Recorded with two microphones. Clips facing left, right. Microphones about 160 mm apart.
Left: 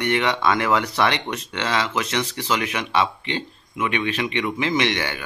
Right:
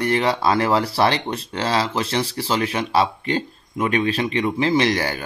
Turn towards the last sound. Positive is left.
turn(degrees=-35)  # may be behind; listen again after turning